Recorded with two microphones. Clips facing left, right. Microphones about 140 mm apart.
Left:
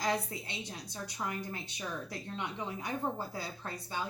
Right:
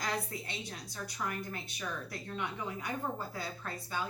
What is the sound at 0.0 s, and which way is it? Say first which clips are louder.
A woman's voice: left 3 dB; 25° left (ahead or behind).